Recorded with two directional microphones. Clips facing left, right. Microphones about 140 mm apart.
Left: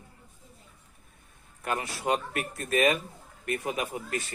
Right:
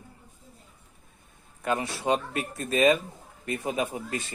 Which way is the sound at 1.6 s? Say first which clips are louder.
Right 3 dB; 25° right (ahead or behind).